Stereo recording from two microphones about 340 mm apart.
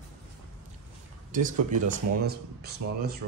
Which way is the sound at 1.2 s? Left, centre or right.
Right.